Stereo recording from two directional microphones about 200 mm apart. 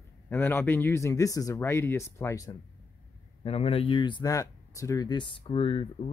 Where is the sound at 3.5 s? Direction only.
30° left (ahead or behind).